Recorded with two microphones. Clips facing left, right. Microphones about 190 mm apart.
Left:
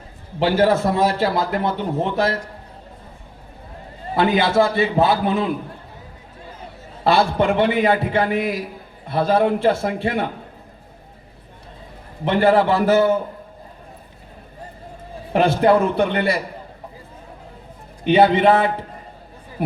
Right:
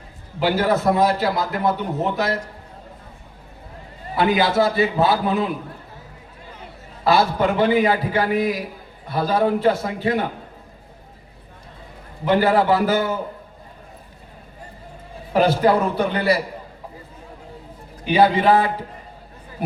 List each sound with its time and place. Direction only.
0.3 s a man's voice: 30° left (ahead or behind)
4.4 s a man's voice: 25° left (ahead or behind)
7.0 s a man's voice: 25° left (ahead or behind)
12.2 s a man's voice: 25° left (ahead or behind)
15.3 s a man's voice: 25° left (ahead or behind)
18.0 s a man's voice: 25° left (ahead or behind)